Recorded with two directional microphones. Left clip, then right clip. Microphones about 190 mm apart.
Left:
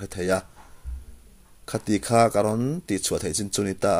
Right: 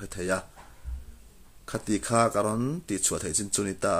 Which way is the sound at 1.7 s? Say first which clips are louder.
Left 4 dB; 20° left (ahead or behind).